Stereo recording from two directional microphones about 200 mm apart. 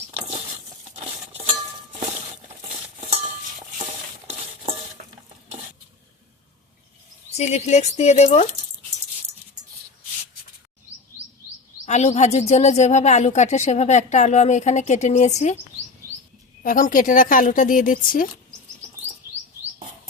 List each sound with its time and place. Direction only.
5.0 s stir: 45° right (ahead or behind)
7.3 s speech: 35° left (ahead or behind)
11.9 s speech: 35° left (ahead or behind)
16.6 s speech: 45° left (ahead or behind)